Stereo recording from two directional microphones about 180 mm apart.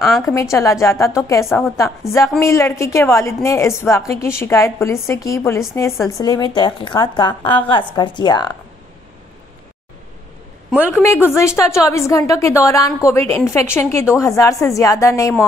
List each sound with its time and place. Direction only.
0.3 s a woman's voice: 15° left (ahead or behind)
10.8 s a woman's voice: 15° left (ahead or behind)